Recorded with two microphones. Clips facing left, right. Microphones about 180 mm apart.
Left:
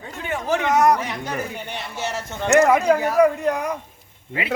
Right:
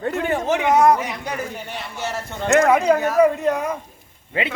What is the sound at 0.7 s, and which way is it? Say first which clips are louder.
Speech: right 2 dB; 30° right (ahead or behind).